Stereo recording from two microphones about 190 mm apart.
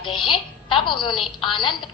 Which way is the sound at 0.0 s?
25° left (ahead or behind).